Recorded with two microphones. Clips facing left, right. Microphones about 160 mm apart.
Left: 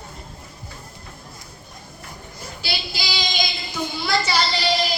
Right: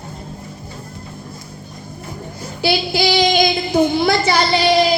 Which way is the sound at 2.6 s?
60° right (ahead or behind).